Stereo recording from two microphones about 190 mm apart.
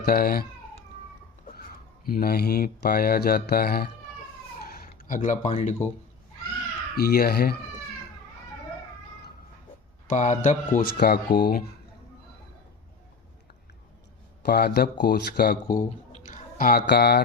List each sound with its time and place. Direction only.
0.0 s speech: 50° left (ahead or behind)
2.0 s speech: 50° left (ahead or behind)
6.9 s speech: 55° left (ahead or behind)
10.1 s speech: 40° left (ahead or behind)
10.8 s speech: 55° left (ahead or behind)
14.4 s speech: 55° left (ahead or behind)
15.7 s speech: 45° left (ahead or behind)